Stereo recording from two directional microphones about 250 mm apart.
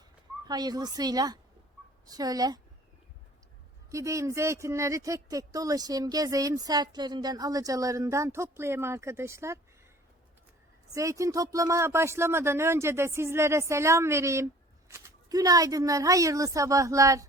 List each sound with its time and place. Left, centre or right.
0.4 s speech: centre
3.9 s speech: centre
10.9 s speech: centre